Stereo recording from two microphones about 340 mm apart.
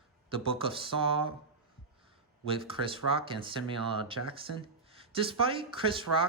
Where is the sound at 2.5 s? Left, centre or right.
Centre.